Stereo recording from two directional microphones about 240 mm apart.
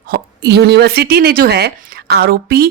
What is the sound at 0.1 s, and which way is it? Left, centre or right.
A woman's voice, right.